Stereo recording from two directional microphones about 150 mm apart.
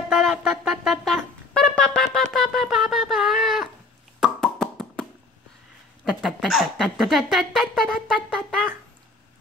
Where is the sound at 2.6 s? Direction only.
Centre (ahead or behind).